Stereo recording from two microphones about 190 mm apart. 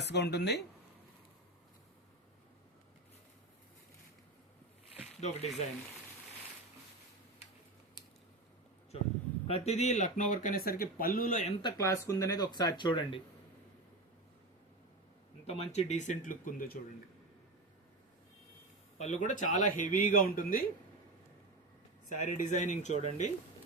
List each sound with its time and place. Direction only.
0.0 s speech: 60° left (ahead or behind)
5.2 s speech: 35° left (ahead or behind)
9.5 s speech: 35° left (ahead or behind)
11.6 s speech: 15° left (ahead or behind)
15.4 s speech: 35° left (ahead or behind)
18.9 s speech: 40° left (ahead or behind)
22.1 s speech: 40° left (ahead or behind)